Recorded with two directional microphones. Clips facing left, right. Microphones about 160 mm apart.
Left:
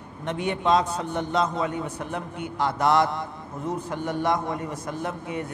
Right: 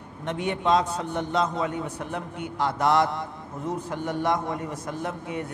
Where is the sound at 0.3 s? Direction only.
15° left (ahead or behind).